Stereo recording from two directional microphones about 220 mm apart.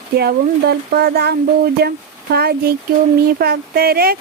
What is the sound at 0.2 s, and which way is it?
Speech, 45° right (ahead or behind).